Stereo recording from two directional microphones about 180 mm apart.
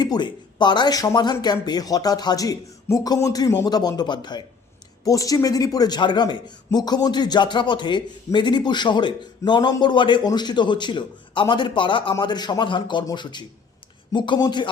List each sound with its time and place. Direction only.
0.0 s speech: 25° left (ahead or behind)